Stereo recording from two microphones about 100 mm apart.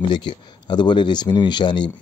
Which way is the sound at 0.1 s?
50° left (ahead or behind).